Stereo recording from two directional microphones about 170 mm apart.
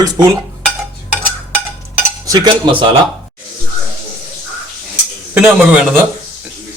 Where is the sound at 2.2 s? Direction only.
25° right (ahead or behind).